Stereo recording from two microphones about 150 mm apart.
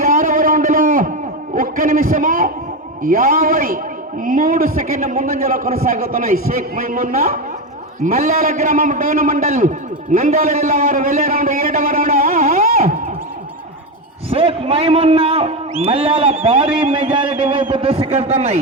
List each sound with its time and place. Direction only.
0.0 s a sound: 65° right (ahead or behind)
3.0 s a man's voice: 70° right (ahead or behind)
14.3 s a man's voice: 40° right (ahead or behind)